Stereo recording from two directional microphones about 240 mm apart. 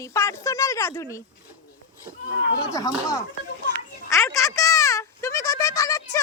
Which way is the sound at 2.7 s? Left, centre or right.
Centre.